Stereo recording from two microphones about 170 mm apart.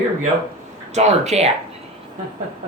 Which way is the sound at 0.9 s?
40° right (ahead or behind).